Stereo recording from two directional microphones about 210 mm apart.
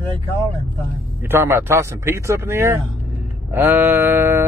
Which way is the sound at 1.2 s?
10° right (ahead or behind).